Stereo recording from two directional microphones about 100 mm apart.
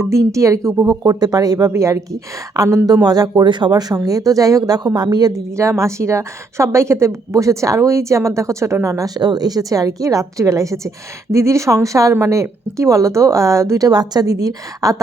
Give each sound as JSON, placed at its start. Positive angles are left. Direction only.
{"t": 0.0, "sound": "a woman's voice", "side_deg": -30}